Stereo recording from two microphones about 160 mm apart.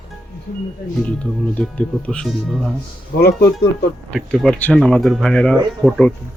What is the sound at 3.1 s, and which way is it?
Speech, 80° left.